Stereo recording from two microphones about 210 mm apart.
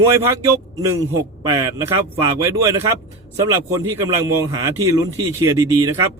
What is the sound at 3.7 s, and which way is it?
A man's voice, 15° right (ahead or behind).